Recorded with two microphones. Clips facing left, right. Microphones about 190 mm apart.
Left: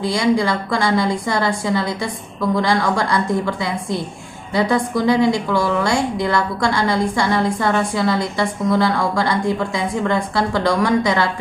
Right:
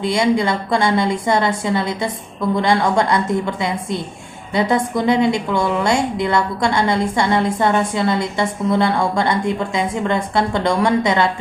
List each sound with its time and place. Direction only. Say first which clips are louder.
0.0 s a woman's voice: right 1 dB; 25° right (ahead or behind)